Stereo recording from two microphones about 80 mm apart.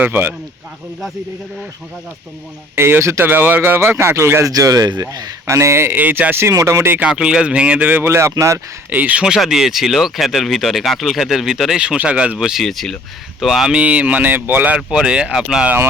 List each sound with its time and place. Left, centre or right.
0.0 s speech: right
2.7 s speech: right
4.5 s speech: right
5.5 s speech: right
6.5 s speech: right
7.0 s speech: centre
8.0 s speech: right
8.9 s speech: centre
9.2 s speech: centre
13.7 s speech: centre
14.8 s speech: centre